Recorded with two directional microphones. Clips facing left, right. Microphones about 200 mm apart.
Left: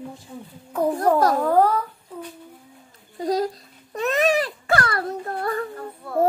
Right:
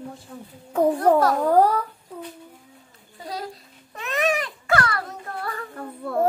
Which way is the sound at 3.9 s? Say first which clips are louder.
Left 4 dB; 35° left (ahead or behind).